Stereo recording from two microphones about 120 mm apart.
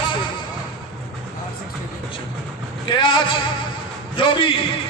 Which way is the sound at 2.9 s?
40° left (ahead or behind).